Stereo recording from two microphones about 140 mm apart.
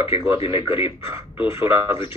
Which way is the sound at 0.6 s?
40° left (ahead or behind).